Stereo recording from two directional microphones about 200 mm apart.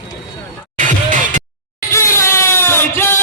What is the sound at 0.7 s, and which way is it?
Music, 40° right (ahead or behind).